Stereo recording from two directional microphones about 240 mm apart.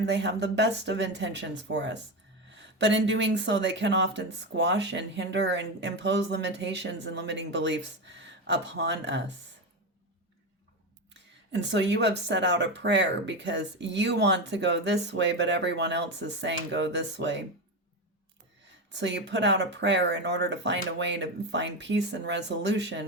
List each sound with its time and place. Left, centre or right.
0.0 s speech: right
11.1 s speech: right
18.9 s speech: right